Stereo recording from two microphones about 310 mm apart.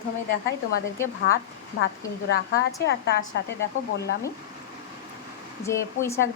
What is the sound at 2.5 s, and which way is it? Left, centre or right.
Speech, left.